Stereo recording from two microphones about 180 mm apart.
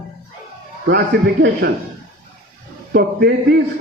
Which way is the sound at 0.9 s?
60° right (ahead or behind).